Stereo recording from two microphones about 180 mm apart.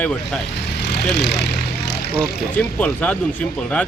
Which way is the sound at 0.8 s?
70° left (ahead or behind).